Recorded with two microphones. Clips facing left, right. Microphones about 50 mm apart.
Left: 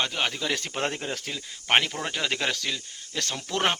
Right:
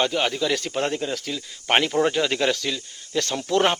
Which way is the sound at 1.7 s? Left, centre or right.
Centre.